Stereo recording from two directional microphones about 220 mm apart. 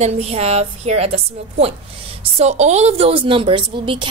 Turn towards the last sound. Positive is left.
turn(degrees=-20)  # may be behind; listen again after turning